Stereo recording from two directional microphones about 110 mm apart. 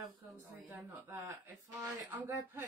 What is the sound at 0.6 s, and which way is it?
Speech, 15° right (ahead or behind).